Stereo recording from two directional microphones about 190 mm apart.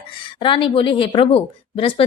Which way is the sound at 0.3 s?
25° left (ahead or behind).